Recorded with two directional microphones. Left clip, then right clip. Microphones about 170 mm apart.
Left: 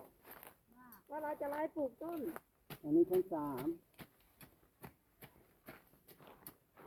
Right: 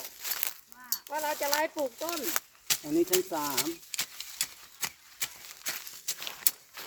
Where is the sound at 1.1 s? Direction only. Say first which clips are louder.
Right 10 dB; 55° right (ahead or behind).